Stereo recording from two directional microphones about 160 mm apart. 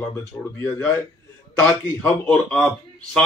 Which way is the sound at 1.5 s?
10° left (ahead or behind).